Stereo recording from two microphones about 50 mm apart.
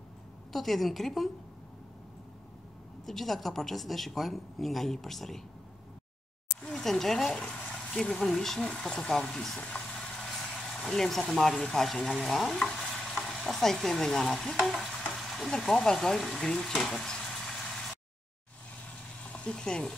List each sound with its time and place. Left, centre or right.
0.5 s a woman's voice: centre
3.1 s a woman's voice: centre
6.6 s speech: centre
10.2 s vehicle: centre
11.6 s a woman's voice: centre
12.9 s stir: centre
16.3 s vehicle: centre
19.3 s speech: centre